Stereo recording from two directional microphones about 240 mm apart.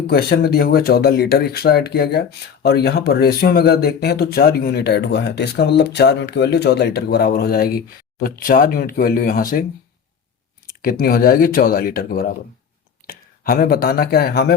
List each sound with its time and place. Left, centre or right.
0.1 s speech: left
10.7 s speech: left